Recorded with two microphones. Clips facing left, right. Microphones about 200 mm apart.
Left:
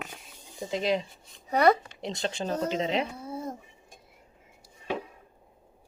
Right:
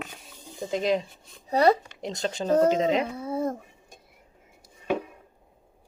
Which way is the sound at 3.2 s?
75° right (ahead or behind).